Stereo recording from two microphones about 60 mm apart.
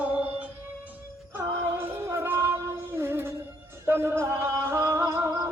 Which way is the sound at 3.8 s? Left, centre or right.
Right.